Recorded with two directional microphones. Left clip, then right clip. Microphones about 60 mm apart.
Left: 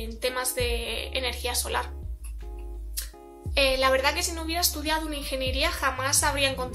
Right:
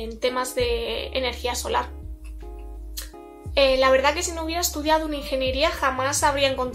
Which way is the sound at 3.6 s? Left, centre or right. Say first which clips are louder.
Right 5 dB; right.